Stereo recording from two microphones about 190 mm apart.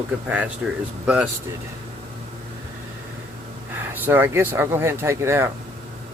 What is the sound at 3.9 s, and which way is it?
Speech, 10° right (ahead or behind).